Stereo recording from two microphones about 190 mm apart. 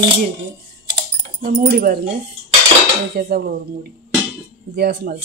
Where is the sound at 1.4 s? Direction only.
50° right (ahead or behind).